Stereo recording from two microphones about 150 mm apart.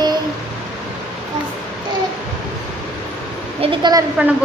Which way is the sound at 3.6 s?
30° right (ahead or behind).